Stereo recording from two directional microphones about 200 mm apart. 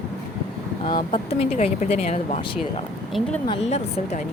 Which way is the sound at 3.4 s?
30° left (ahead or behind).